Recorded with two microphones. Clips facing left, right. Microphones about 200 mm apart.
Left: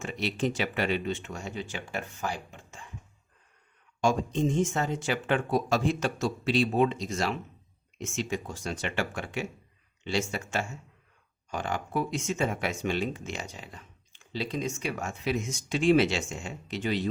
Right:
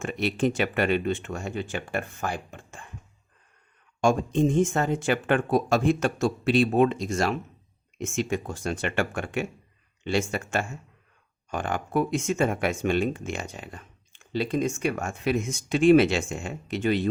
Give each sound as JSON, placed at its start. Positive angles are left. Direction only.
{"t": 0.0, "sound": "speech", "side_deg": -55}
{"t": 4.0, "sound": "speech", "side_deg": -55}